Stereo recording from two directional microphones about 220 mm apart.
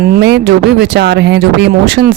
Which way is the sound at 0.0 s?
45° right (ahead or behind).